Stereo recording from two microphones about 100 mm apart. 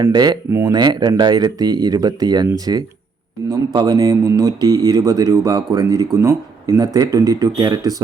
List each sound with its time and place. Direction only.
0.0 s speech: 40° right (ahead or behind)
3.9 s speech: 35° right (ahead or behind)